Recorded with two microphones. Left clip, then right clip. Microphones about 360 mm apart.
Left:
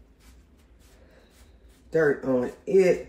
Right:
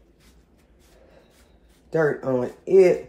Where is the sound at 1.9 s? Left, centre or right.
Centre.